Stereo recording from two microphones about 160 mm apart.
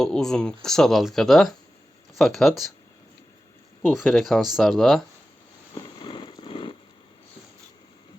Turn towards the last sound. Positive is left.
turn(degrees=30)  # may be behind; listen again after turning